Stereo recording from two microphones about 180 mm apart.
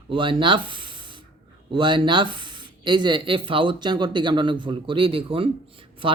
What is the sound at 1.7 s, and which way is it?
Speech, 25° right (ahead or behind).